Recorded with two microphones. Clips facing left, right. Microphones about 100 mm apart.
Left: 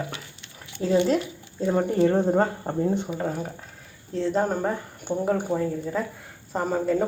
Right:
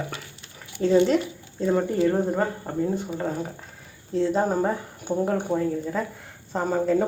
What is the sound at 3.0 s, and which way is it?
Speech, centre (ahead or behind).